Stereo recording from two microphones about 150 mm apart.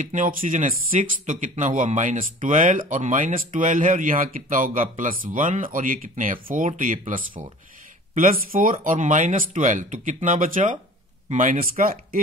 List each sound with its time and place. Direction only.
0.0 s speech: 60° right (ahead or behind)